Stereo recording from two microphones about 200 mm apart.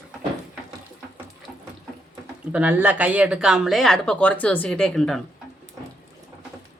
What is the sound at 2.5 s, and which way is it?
Speech, 10° right (ahead or behind).